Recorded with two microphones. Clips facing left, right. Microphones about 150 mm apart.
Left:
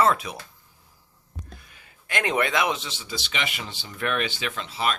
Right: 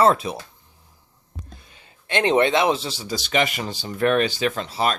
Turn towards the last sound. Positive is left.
turn(degrees=-40)  # may be behind; listen again after turning